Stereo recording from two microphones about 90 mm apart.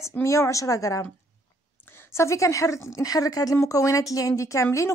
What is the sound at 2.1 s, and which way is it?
Speech, 35° left (ahead or behind).